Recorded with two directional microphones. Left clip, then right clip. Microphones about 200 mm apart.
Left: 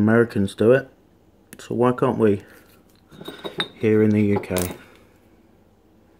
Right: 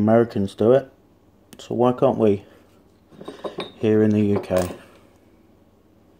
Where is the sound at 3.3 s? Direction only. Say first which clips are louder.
Left 3 dB; 5° left (ahead or behind).